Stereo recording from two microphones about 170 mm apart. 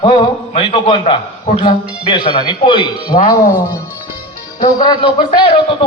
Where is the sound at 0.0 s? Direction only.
30° left (ahead or behind).